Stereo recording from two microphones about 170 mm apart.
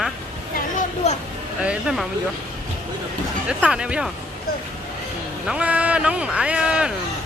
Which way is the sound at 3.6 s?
5° right (ahead or behind).